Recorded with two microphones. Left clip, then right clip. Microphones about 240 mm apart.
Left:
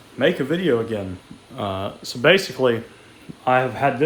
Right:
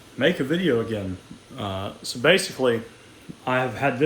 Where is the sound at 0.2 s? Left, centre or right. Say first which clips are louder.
Left 2 dB; left.